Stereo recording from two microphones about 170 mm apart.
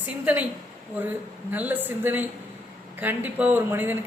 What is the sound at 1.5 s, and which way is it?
Speech, 10° right (ahead or behind).